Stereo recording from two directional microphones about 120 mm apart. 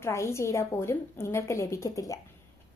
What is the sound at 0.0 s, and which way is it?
A woman's voice, 25° left (ahead or behind).